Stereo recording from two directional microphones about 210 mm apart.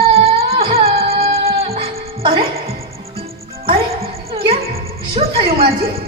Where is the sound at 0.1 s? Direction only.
25° right (ahead or behind).